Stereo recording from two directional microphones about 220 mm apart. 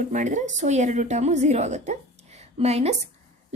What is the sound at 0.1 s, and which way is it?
A woman's voice, 35° right (ahead or behind).